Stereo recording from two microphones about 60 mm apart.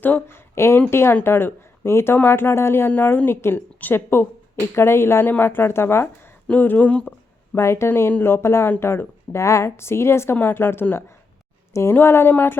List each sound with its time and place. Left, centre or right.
0.0 s speech: left
0.3 s a woman's voice: left
2.9 s a woman's voice: left
5.2 s a woman's voice: left
6.5 s speech: left
7.5 s a woman's voice: left
11.7 s speech: left
11.9 s a woman's voice: left